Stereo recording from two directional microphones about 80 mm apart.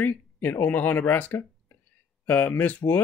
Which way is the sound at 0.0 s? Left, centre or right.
Left.